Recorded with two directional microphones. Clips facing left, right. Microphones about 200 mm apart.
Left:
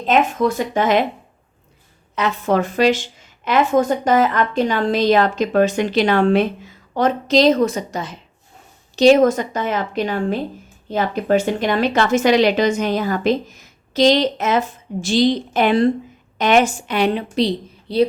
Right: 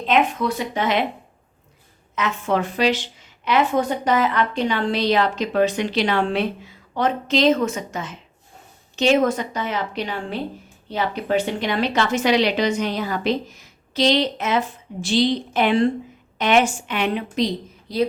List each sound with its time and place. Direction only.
0.0 s a woman's voice: 45° left (ahead or behind)
2.1 s a woman's voice: 35° left (ahead or behind)